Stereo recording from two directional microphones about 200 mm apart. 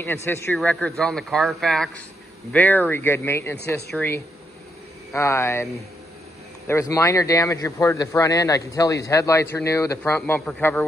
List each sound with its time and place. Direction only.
0.0 s speech: 10° left (ahead or behind)
6.7 s speech: 15° left (ahead or behind)